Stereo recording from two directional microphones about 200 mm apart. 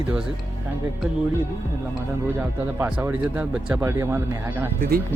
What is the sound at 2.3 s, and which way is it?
Speech, 5° right (ahead or behind).